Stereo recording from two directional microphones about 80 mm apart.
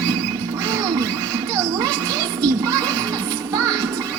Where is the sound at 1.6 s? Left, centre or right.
Right.